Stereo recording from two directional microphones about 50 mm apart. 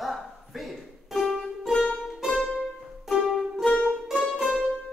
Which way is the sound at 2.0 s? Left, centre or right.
Centre.